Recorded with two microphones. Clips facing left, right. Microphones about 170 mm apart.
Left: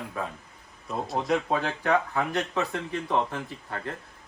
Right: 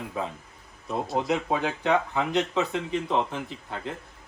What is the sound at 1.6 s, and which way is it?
Speech, 15° right (ahead or behind).